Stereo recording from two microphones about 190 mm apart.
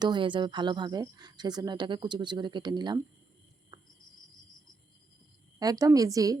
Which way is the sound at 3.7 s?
20° right (ahead or behind).